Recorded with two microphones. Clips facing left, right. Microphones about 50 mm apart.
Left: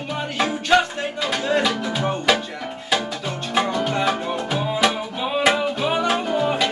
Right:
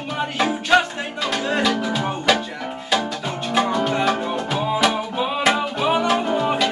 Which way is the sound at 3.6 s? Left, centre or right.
Centre.